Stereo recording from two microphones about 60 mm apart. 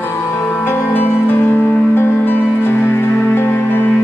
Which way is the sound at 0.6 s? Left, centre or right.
Left.